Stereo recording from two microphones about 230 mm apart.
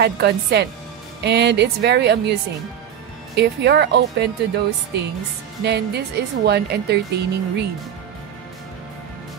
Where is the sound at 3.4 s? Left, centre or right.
Right.